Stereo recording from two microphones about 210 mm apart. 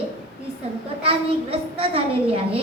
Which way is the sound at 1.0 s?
25° right (ahead or behind).